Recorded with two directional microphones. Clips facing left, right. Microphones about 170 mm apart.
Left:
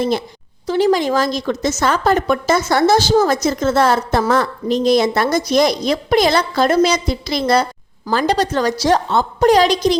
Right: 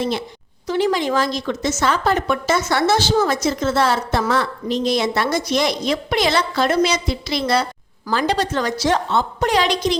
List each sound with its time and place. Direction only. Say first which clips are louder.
0.0 s a woman's voice: left 4 dB; 45° left (ahead or behind)